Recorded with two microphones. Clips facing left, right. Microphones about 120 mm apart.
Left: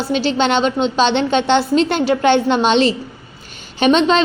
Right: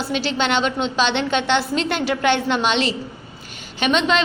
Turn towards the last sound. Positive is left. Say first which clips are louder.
# left 6 dB
turn(degrees=35)  # may be behind; listen again after turning